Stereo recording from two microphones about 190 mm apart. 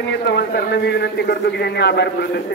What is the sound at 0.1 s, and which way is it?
A man's voice, 60° left (ahead or behind).